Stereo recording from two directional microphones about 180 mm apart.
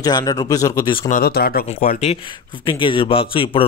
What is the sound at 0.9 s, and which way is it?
A man's voice, 45° left (ahead or behind).